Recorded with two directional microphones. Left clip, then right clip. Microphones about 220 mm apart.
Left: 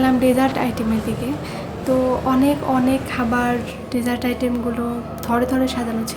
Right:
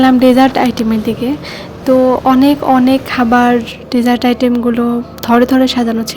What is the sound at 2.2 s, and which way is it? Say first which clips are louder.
A woman's voice: right 8 dB; 40° right (ahead or behind).